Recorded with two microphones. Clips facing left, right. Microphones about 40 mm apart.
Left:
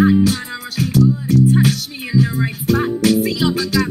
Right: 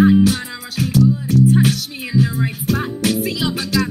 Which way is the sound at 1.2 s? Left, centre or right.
Left.